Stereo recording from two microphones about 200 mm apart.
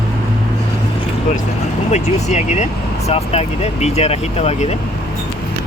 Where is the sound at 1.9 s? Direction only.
35° left (ahead or behind).